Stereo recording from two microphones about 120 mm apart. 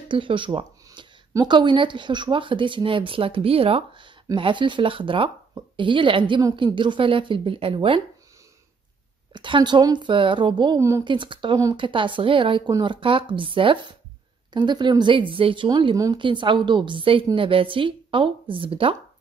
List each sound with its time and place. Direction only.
0.1 s speech: 45° right (ahead or behind)
9.3 s a woman's voice: 40° right (ahead or behind)
10.8 s speech: 25° right (ahead or behind)
11.1 s a woman's voice: 40° right (ahead or behind)